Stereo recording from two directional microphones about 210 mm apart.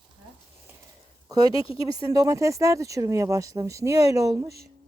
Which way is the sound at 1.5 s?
25° left (ahead or behind).